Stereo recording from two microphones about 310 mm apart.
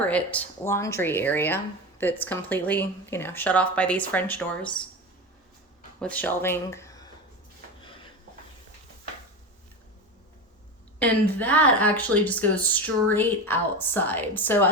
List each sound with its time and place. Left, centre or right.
0.0 s speech: centre
6.0 s speech: centre
11.0 s speech: centre